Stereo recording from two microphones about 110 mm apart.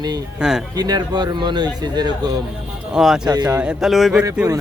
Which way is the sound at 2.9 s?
5° right (ahead or behind).